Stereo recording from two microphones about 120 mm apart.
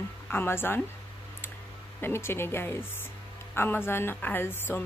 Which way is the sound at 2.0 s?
20° left (ahead or behind).